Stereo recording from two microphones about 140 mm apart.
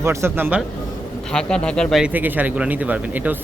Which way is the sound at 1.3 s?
5° left (ahead or behind).